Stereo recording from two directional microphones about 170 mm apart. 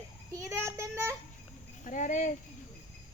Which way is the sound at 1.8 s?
50° left (ahead or behind).